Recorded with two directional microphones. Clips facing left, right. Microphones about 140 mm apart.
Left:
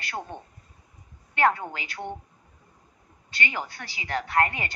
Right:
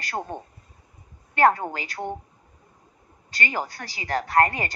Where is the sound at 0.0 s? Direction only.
40° right (ahead or behind).